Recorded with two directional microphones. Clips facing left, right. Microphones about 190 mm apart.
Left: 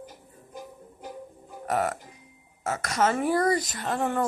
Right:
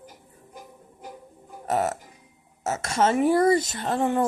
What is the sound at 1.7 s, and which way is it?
Speech, 25° right (ahead or behind).